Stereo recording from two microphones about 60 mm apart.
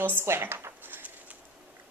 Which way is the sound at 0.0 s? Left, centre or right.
Right.